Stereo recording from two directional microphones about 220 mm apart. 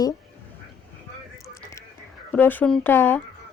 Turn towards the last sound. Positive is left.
turn(degrees=10)  # may be behind; listen again after turning